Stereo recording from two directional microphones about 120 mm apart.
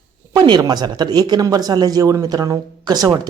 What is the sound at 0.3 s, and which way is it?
Speech, 35° right (ahead or behind).